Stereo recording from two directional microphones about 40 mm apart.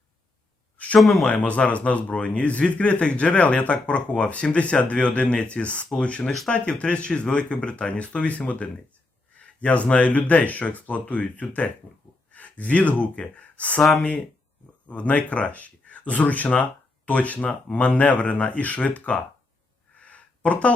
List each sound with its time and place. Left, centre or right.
0.9 s speech: centre
1.3 s a man's voice: left
14.8 s a man's voice: left
20.0 s a sound: left